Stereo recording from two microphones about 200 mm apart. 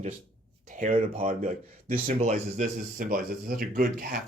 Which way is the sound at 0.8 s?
35° right (ahead or behind).